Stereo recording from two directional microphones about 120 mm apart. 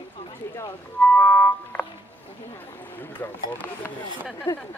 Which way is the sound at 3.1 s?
15° left (ahead or behind).